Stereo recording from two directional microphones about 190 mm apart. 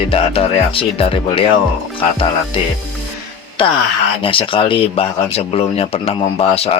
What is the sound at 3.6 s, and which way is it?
Speech, 25° left (ahead or behind).